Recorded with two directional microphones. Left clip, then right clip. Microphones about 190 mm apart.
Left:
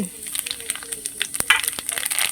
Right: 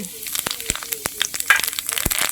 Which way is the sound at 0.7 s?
10° right (ahead or behind).